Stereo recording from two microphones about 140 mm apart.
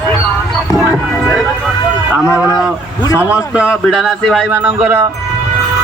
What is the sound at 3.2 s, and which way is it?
A man's voice, 10° right (ahead or behind).